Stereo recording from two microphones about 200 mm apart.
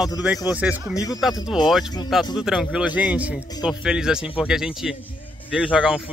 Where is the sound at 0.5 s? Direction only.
5° right (ahead or behind).